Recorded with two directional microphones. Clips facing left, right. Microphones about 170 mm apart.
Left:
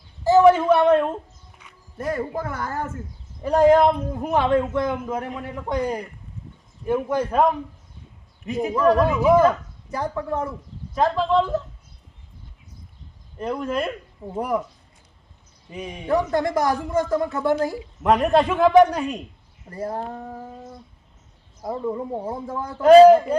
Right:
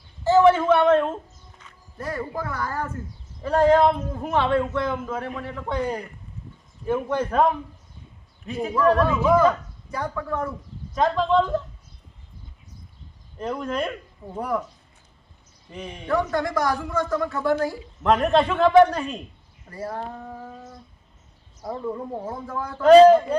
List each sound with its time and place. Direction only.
0.3 s a sound: 15° left (ahead or behind)
1.5 s a man's voice: 15° left (ahead or behind)
8.4 s a man's voice: 15° left (ahead or behind)
10.0 s a man's voice: 25° left (ahead or behind)
10.9 s speech: 5° left (ahead or behind)
13.4 s speech: 5° left (ahead or behind)
14.3 s a man's voice: 15° left (ahead or behind)
15.7 s a man's voice: 10° left (ahead or behind)
18.0 s a man's voice: 10° left (ahead or behind)
19.9 s a man's voice: 30° left (ahead or behind)
21.6 s a man's voice: 15° left (ahead or behind)
22.8 s a man's voice: 10° left (ahead or behind)